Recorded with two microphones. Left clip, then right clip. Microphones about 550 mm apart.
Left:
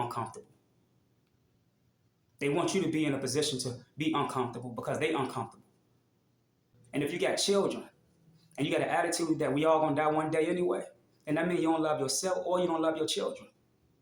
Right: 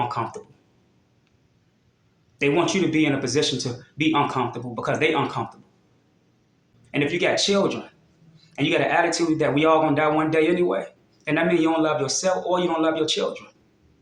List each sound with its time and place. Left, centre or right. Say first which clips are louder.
2.4 s speech: right 9 dB; left
6.9 s speech: right 9 dB; left